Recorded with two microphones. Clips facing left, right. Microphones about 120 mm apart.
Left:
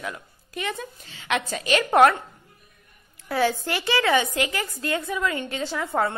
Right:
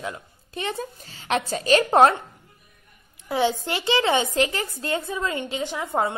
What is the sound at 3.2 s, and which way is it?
A woman's voice, 20° right (ahead or behind).